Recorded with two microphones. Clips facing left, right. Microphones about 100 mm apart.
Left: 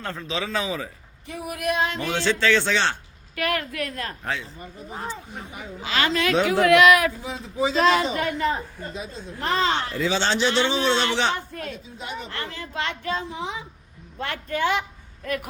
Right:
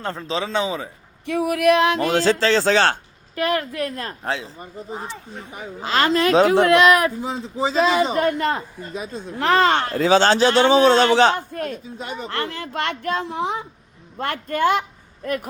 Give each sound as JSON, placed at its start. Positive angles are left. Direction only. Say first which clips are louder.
{"t": 0.0, "sound": "speech", "louder": "right 4 dB", "side_deg": -30}
{"t": 1.3, "sound": "a sound", "louder": "right 10 dB", "side_deg": -70}
{"t": 2.0, "sound": "a woman's voice", "louder": "right 4 dB", "side_deg": -40}
{"t": 5.8, "sound": "speech", "louder": "right 5 dB", "side_deg": -40}
{"t": 8.4, "sound": "speech", "louder": "right 2 dB", "side_deg": -75}